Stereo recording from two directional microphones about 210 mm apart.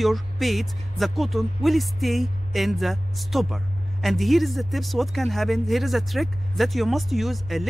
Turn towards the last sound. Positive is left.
turn(degrees=0)  # may be behind; listen again after turning